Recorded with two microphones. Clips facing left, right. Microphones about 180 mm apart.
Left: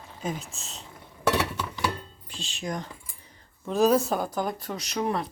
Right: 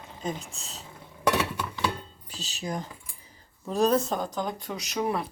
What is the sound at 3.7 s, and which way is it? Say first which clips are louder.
Speech: left 2 dB; 5° left (ahead or behind).